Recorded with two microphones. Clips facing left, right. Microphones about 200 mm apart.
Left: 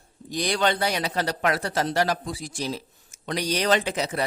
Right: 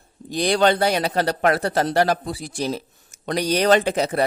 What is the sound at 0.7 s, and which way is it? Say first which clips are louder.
Speech: right 6 dB; 55° right (ahead or behind).